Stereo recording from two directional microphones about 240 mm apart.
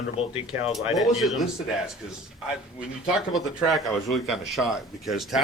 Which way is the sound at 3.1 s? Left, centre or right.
Centre.